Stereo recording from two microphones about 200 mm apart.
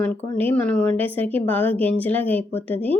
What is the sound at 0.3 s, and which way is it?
A woman's voice, 10° left (ahead or behind).